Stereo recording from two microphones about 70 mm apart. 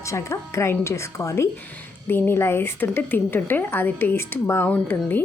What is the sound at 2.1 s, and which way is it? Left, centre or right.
A woman's voice, left.